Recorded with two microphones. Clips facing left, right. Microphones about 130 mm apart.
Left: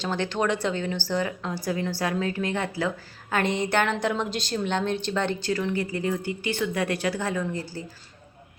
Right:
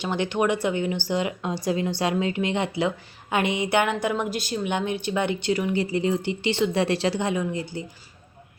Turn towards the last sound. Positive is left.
turn(degrees=-20)  # may be behind; listen again after turning